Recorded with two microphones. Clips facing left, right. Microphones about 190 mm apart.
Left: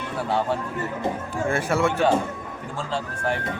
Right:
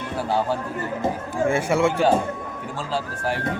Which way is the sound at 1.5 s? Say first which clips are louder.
Right 2 dB; 20° right (ahead or behind).